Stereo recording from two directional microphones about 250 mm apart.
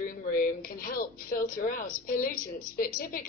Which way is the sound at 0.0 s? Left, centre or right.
Left.